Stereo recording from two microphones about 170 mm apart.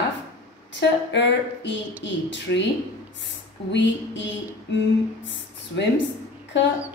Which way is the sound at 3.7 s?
90° left.